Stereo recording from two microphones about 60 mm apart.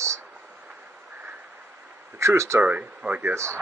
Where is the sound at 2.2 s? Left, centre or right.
Right.